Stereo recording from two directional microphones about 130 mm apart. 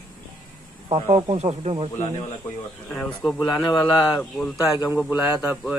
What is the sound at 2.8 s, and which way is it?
Speech, 15° left (ahead or behind).